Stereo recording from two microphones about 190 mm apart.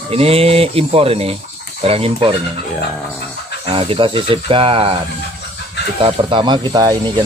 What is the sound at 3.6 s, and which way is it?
Speech, 30° right (ahead or behind).